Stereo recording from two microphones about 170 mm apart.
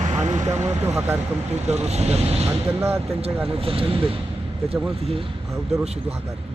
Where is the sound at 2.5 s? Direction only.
15° right (ahead or behind).